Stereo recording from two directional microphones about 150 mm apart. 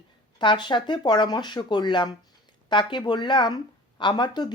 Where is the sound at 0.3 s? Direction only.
30° left (ahead or behind).